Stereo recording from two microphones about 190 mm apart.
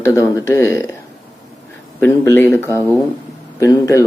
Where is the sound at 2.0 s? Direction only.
10° left (ahead or behind).